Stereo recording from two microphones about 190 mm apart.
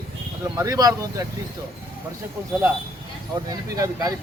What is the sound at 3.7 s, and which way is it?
Speech, 15° right (ahead or behind).